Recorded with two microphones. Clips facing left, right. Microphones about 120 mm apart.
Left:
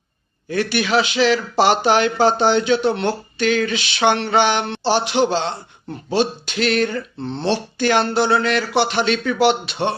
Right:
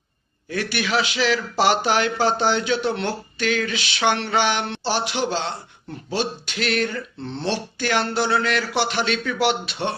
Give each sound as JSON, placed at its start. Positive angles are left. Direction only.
{"t": 0.5, "sound": "speech", "side_deg": 25}